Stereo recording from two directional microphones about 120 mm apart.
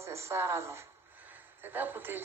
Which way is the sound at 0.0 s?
25° right (ahead or behind).